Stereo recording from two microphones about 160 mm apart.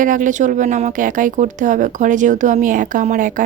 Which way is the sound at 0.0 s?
55° right (ahead or behind).